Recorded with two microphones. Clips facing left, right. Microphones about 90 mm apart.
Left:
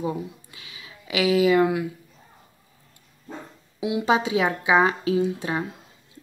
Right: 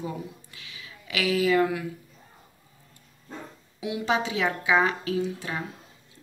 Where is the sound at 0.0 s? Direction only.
20° left (ahead or behind).